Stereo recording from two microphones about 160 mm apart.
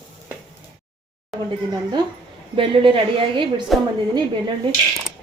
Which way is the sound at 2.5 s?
35° right (ahead or behind).